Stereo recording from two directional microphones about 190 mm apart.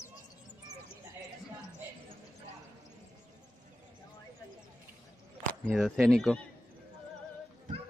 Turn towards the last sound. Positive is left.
turn(degrees=0)  # may be behind; listen again after turning